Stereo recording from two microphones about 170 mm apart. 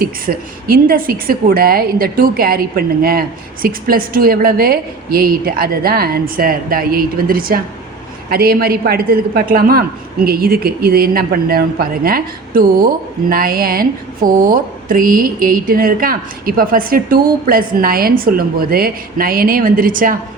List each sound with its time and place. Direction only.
0.0 s a woman's voice: 60° right (ahead or behind)